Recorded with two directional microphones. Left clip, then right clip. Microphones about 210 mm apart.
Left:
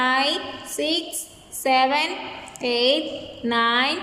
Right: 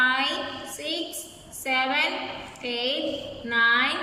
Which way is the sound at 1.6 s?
25° left (ahead or behind).